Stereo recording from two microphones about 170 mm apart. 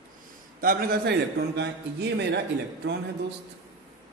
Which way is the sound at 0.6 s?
60° right (ahead or behind).